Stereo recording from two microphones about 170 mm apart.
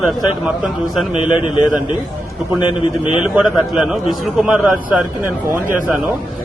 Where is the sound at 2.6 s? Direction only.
30° left (ahead or behind).